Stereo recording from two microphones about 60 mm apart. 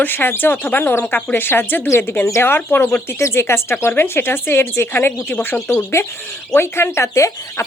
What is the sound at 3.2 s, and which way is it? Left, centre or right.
Speech, left.